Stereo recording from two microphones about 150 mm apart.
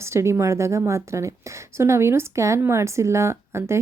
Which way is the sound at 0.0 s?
20° right (ahead or behind).